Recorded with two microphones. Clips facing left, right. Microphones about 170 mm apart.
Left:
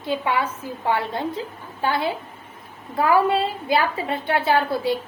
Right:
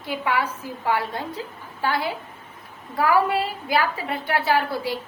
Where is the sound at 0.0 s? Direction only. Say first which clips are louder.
Left 2 dB; 25° left (ahead or behind).